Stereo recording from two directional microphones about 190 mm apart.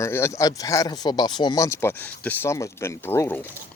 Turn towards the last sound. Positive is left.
turn(degrees=10)  # may be behind; listen again after turning